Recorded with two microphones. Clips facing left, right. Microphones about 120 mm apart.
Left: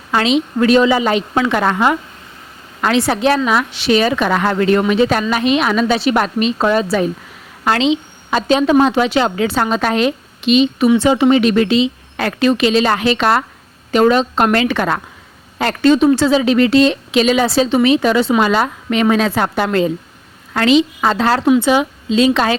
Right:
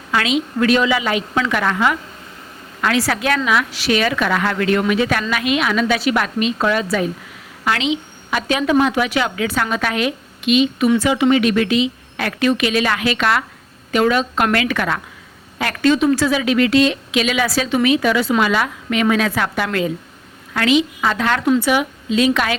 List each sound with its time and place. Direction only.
0.1 s a woman's voice: 25° left (ahead or behind)